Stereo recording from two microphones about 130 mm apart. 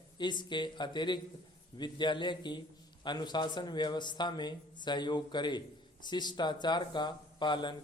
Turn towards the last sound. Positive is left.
turn(degrees=35)  # may be behind; listen again after turning